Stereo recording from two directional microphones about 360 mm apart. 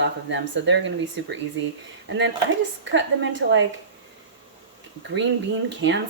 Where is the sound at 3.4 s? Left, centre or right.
Right.